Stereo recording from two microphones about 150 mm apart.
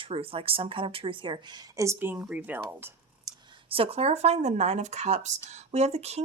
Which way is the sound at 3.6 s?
40° right (ahead or behind).